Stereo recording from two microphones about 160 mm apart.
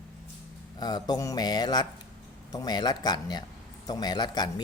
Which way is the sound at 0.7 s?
25° left (ahead or behind).